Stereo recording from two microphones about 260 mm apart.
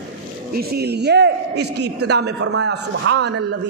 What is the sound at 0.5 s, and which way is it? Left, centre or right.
A man's voice, right.